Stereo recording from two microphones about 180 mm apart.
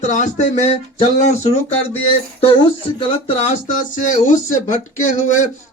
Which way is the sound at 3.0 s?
35° left (ahead or behind).